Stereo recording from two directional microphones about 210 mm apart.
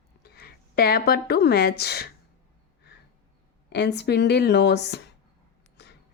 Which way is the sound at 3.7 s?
50° left (ahead or behind).